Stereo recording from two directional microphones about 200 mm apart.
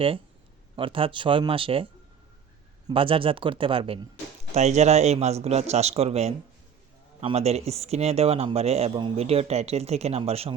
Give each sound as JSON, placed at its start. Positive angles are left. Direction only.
{"t": 0.8, "sound": "speech", "side_deg": -25}